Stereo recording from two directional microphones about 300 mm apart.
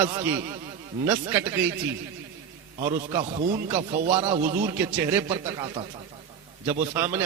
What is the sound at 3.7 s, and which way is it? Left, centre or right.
Speech, right.